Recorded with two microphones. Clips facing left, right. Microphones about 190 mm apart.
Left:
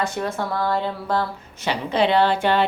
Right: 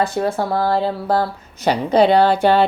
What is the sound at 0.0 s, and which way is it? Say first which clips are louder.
Speech: right 6 dB; 35° right (ahead or behind).